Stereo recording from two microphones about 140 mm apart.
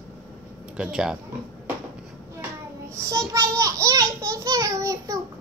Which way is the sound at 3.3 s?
25° right (ahead or behind).